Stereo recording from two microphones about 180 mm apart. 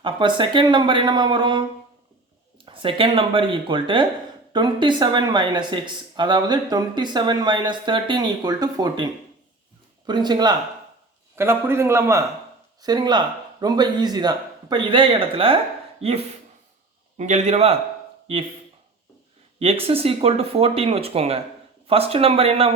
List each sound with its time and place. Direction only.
0.0 s speech: 25° right (ahead or behind)
2.6 s speech: 30° right (ahead or behind)
10.1 s a man's voice: 25° right (ahead or behind)
19.5 s speech: 35° right (ahead or behind)